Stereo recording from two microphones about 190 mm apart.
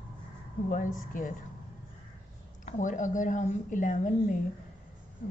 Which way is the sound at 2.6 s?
40° left (ahead or behind).